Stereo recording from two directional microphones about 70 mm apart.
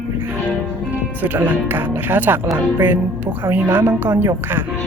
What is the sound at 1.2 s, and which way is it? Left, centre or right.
Speech, right.